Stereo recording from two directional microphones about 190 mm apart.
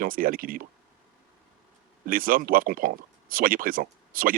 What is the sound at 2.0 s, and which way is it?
Speech, 50° right (ahead or behind).